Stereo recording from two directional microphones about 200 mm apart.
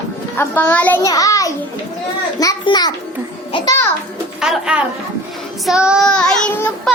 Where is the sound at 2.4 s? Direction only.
20° left (ahead or behind).